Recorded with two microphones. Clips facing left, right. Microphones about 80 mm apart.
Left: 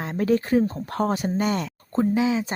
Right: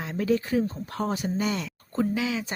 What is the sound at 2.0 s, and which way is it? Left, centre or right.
Speech, left.